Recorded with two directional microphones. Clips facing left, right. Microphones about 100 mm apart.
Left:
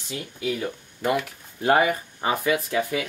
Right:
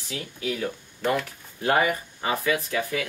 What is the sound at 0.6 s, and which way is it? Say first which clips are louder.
Speech: even; 15° left (ahead or behind).